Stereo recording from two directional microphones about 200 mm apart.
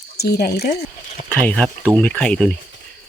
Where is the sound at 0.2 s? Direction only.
50° left (ahead or behind).